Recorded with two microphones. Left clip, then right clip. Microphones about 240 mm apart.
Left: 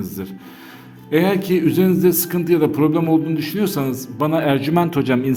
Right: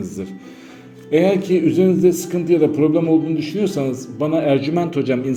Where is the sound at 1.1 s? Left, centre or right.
Left.